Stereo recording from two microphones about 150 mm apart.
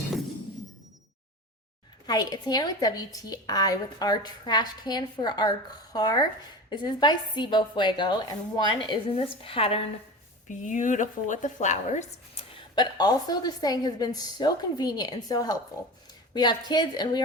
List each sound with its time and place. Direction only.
2.0 s a woman's voice: 25° left (ahead or behind)
10.7 s speech: 55° left (ahead or behind)
12.5 s a woman's voice: 30° left (ahead or behind)